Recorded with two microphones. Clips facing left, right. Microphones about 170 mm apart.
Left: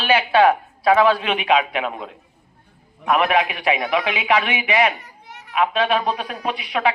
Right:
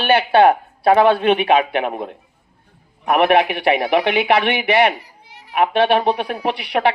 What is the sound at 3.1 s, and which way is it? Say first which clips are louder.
Speech: right 4 dB; 60° right (ahead or behind).